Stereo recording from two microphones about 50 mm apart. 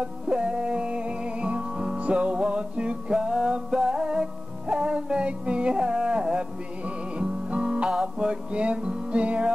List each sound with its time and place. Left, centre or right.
0.0 s music: right